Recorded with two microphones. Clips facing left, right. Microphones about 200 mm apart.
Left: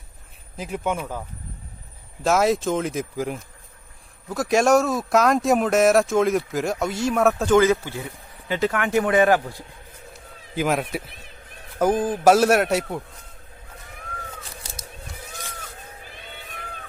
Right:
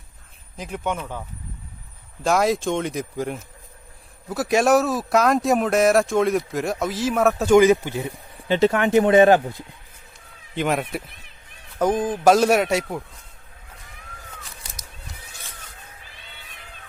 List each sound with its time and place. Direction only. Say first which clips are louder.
0.5 s speech: left 1 dB; 5° left (ahead or behind)
2.2 s speech: even; centre (ahead or behind)
7.5 s speech: right 5 dB; 15° right (ahead or behind)
10.5 s speech: even; centre (ahead or behind)